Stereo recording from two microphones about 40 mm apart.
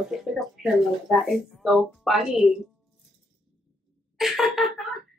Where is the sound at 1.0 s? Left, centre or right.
Centre.